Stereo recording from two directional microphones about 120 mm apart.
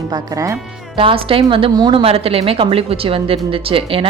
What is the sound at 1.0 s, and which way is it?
Speech, 50° right (ahead or behind).